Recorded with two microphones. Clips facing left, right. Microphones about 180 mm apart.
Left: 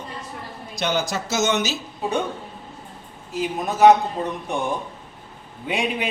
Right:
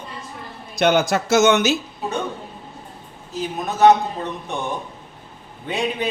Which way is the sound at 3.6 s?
10° left (ahead or behind).